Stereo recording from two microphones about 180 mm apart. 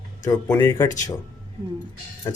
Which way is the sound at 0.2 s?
15° left (ahead or behind).